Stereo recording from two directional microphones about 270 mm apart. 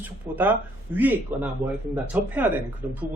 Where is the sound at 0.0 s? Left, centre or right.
Centre.